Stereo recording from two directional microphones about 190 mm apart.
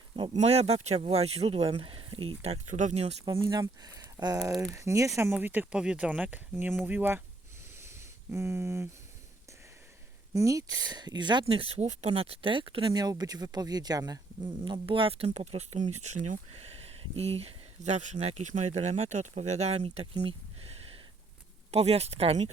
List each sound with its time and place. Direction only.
0.2 s speech: 35° right (ahead or behind)
3.2 s speech: 20° right (ahead or behind)
7.8 s a sound: 15° right (ahead or behind)
10.3 s speech: 15° right (ahead or behind); by 22.4 s 35° right (ahead or behind)